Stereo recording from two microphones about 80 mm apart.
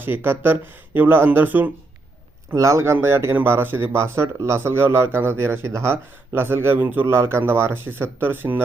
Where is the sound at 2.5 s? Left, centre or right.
Right.